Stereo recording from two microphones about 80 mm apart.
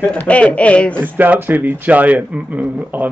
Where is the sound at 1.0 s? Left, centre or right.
Right.